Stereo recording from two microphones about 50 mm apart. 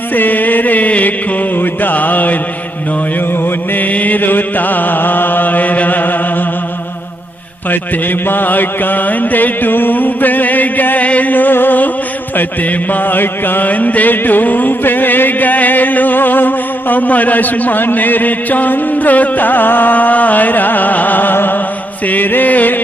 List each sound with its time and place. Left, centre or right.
0.1 s mantra: left
3.4 s music: left
7.7 s mantra: left